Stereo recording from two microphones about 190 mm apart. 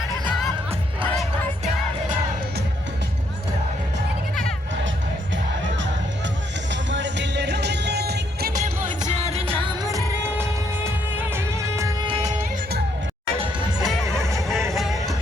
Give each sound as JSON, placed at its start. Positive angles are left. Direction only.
{"t": 6.7, "sound": "music", "side_deg": -70}
{"t": 9.2, "sound": "music", "side_deg": -30}
{"t": 13.8, "sound": "music", "side_deg": 0}
{"t": 14.3, "sound": "a sound", "side_deg": 0}
{"t": 14.7, "sound": "vehicle", "side_deg": 0}